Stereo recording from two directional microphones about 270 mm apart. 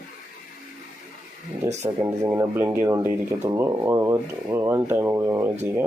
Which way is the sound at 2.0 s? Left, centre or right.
Centre.